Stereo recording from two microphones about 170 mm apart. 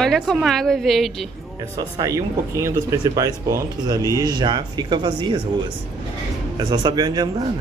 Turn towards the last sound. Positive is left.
turn(degrees=-25)  # may be behind; listen again after turning